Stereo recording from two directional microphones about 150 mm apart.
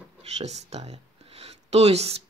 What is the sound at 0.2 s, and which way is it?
Speech, 45° right (ahead or behind).